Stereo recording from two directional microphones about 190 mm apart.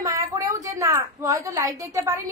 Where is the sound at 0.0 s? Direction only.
15° right (ahead or behind).